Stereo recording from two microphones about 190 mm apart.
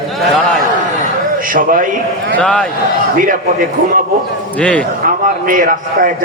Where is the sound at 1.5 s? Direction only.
45° right (ahead or behind).